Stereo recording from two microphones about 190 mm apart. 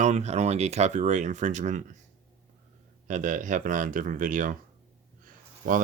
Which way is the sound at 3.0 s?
40° right (ahead or behind).